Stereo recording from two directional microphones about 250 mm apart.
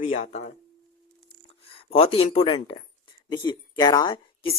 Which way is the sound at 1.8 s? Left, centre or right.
Left.